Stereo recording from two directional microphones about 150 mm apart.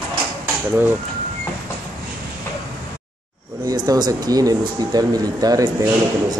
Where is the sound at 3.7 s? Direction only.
25° right (ahead or behind).